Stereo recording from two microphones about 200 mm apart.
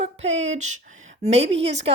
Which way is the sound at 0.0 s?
30° right (ahead or behind).